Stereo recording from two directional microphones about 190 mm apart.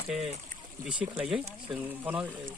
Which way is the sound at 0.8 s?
5° right (ahead or behind).